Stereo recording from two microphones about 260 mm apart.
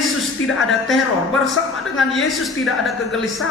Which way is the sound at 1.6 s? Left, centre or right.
Left.